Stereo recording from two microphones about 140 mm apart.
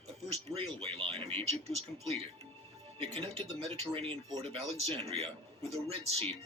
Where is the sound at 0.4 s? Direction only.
45° right (ahead or behind).